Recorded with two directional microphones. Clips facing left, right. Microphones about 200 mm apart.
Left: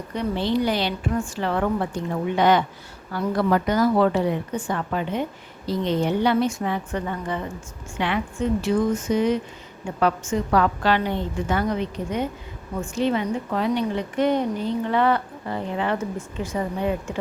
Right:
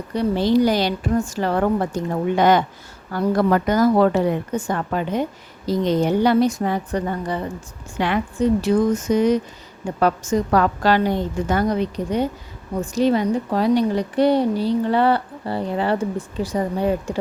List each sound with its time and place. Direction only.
0.1 s a woman's voice: 35° right (ahead or behind)